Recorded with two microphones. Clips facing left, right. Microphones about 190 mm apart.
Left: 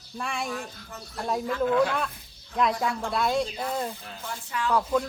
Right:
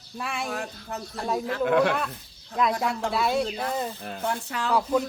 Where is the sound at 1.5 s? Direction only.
65° right (ahead or behind).